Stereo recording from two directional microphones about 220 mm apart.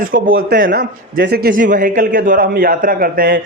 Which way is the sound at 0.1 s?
45° right (ahead or behind).